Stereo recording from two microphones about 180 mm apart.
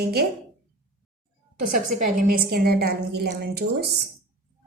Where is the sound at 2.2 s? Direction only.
55° right (ahead or behind).